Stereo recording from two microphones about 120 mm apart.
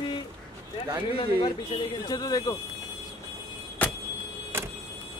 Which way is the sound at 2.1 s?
35° left (ahead or behind).